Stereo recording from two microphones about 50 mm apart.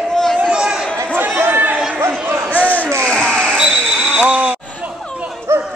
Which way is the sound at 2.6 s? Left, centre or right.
Left.